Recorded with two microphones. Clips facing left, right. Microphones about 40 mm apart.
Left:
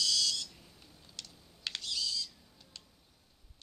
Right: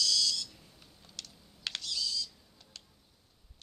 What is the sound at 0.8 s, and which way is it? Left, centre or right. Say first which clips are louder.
Typing: right 1 dB; centre.